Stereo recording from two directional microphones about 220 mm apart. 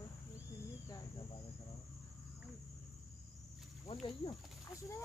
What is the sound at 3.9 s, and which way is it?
Snake, 25° left (ahead or behind).